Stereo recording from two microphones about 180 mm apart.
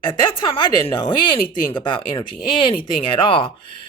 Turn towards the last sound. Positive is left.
turn(degrees=30)  # may be behind; listen again after turning